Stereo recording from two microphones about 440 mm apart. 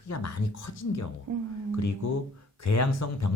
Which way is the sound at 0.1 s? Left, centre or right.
Left.